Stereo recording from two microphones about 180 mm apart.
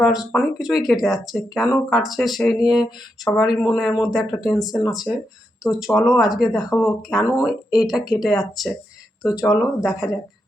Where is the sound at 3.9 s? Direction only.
20° left (ahead or behind).